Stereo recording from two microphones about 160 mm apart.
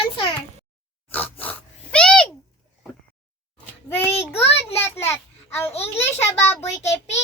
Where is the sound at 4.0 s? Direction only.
15° left (ahead or behind).